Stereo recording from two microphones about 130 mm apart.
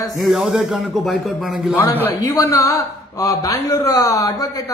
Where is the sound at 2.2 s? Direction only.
25° left (ahead or behind).